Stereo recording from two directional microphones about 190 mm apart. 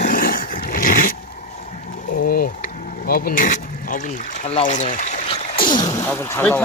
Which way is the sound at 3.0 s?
50° left (ahead or behind).